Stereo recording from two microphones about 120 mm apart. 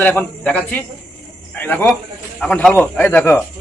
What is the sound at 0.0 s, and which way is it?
Speech, 10° left (ahead or behind).